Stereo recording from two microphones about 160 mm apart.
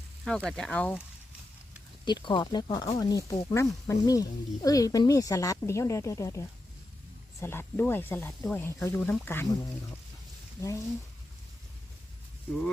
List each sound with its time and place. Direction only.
0.3 s speech: 5° left (ahead or behind)
2.0 s speech: 30° left (ahead or behind); by 9.5 s 15° left (ahead or behind)
10.6 s speech: 20° left (ahead or behind)